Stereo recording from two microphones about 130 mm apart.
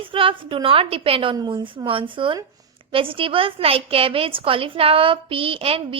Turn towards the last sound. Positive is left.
turn(degrees=-45)  # may be behind; listen again after turning